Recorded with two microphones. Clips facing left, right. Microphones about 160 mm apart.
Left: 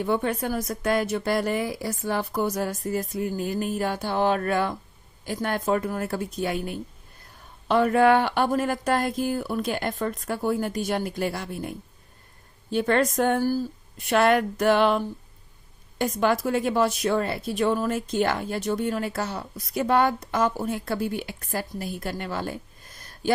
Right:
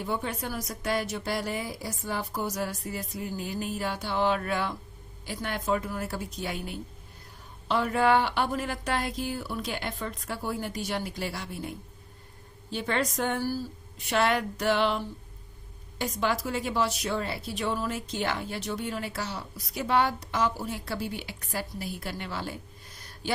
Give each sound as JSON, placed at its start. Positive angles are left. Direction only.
{"t": 0.0, "sound": "a woman's voice", "side_deg": 60}
{"t": 12.7, "sound": "a woman's voice", "side_deg": 50}